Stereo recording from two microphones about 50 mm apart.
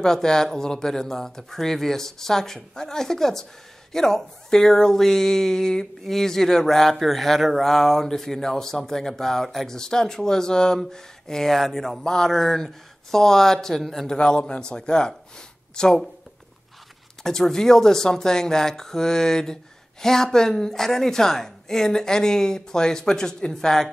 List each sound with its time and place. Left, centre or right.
0.0 s speech: centre
14.0 s speech: centre
17.2 s speech: centre